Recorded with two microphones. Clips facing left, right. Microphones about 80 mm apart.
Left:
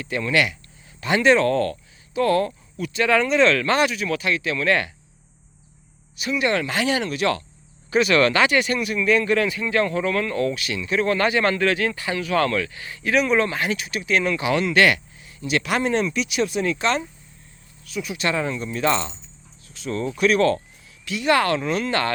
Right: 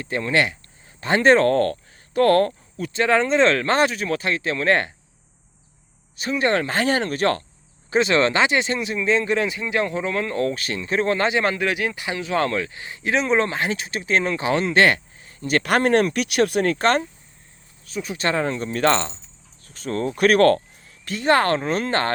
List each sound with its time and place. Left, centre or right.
0.0 s speech: right
2.7 s speech: right
6.1 s speech: right
7.9 s speech: right
17.8 s speech: right
21.0 s speech: right